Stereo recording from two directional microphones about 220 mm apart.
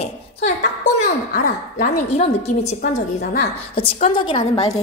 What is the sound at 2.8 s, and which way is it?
Speech, 45° left (ahead or behind).